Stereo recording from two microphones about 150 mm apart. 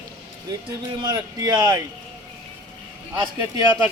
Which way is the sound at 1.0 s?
25° right (ahead or behind).